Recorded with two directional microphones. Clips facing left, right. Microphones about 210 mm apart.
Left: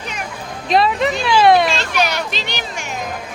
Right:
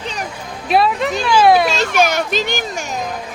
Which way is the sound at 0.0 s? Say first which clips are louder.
Right 3 dB; 35° right (ahead or behind).